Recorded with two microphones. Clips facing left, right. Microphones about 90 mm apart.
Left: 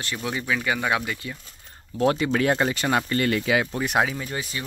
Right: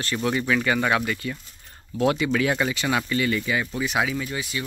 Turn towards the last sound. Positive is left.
turn(degrees=40)  # may be behind; listen again after turning